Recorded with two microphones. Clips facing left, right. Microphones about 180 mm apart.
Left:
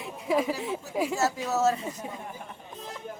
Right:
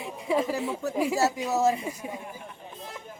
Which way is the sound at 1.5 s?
15° right (ahead or behind).